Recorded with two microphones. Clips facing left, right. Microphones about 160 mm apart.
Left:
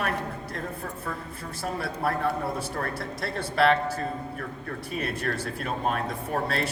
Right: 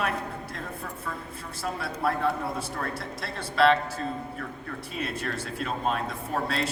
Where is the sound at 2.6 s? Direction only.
55° left (ahead or behind).